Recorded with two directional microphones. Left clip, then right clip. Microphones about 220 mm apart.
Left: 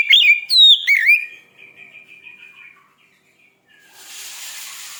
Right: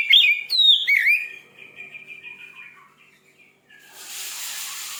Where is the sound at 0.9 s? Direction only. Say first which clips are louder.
Left 4 dB; 25° left (ahead or behind).